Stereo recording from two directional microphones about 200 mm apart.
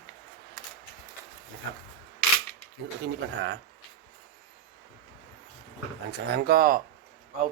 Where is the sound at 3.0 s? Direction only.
65° right (ahead or behind).